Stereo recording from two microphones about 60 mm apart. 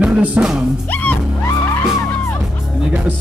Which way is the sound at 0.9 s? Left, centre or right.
Left.